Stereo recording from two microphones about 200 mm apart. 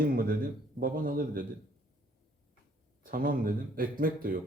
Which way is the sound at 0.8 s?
45° right (ahead or behind).